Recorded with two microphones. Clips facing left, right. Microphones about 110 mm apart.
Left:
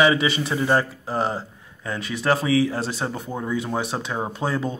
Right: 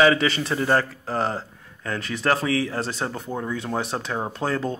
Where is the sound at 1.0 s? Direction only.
10° left (ahead or behind).